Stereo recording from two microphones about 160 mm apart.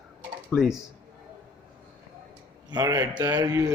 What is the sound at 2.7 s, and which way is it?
Speech, 25° right (ahead or behind).